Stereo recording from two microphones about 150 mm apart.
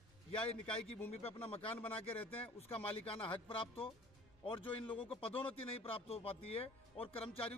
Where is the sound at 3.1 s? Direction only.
35° left (ahead or behind).